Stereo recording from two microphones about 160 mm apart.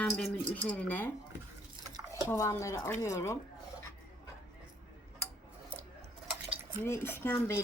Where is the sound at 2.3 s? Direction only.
20° left (ahead or behind).